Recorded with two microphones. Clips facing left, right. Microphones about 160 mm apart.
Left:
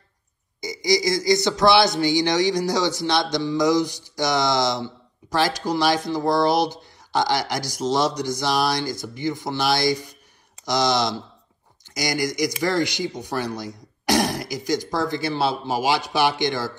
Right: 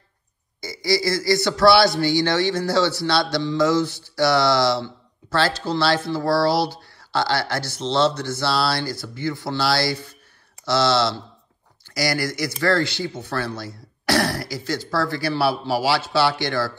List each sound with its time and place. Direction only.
0.6 s a man's voice: 15° left (ahead or behind)